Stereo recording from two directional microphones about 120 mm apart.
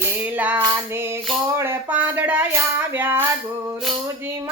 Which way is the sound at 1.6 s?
15° right (ahead or behind).